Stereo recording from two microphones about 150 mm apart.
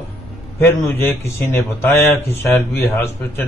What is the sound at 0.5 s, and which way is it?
A man's voice, 15° left (ahead or behind).